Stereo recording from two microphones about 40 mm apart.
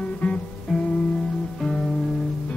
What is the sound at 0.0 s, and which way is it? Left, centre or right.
Music, left.